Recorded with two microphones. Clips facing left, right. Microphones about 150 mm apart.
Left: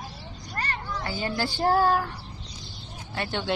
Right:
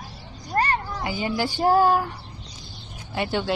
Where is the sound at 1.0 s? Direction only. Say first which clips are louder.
Even; 15° right (ahead or behind).